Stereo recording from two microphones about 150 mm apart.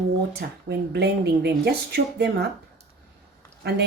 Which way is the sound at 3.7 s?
90° right.